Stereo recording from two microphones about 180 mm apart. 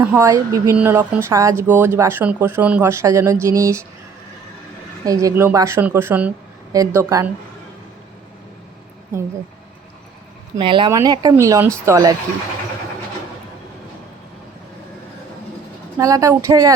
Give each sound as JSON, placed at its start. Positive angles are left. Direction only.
{"t": 0.0, "sound": "speech", "side_deg": -15}
{"t": 5.0, "sound": "speech", "side_deg": -20}
{"t": 10.6, "sound": "speech", "side_deg": -25}
{"t": 16.0, "sound": "speech", "side_deg": -20}